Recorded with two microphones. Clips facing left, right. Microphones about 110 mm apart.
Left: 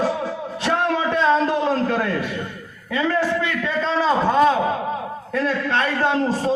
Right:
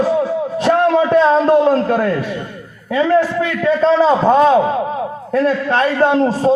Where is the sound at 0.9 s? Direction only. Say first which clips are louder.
Right 7 dB; 50° right (ahead or behind).